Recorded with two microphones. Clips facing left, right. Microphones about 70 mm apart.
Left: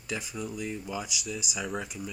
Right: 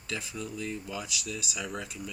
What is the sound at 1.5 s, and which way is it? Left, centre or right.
Speech, centre.